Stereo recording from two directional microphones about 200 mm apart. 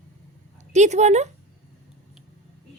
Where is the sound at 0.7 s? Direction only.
35° right (ahead or behind).